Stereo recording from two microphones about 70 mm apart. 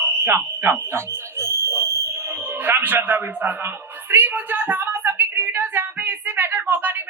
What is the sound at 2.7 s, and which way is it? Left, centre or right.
Speech, right.